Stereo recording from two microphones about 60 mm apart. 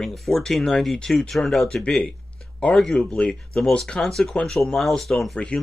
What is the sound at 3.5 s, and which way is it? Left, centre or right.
Speech, centre.